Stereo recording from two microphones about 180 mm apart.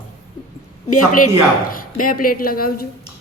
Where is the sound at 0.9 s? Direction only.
50° left (ahead or behind).